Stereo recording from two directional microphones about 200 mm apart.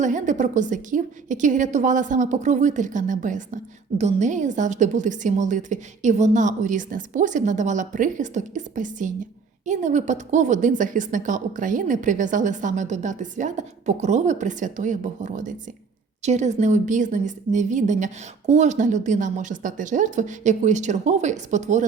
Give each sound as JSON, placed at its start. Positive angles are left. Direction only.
{"t": 0.0, "sound": "a woman's voice", "side_deg": -40}